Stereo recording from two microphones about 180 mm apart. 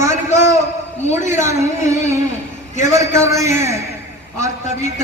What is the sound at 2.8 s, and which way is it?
A man's voice, 15° right (ahead or behind).